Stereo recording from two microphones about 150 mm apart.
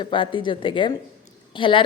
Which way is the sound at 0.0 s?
35° left (ahead or behind).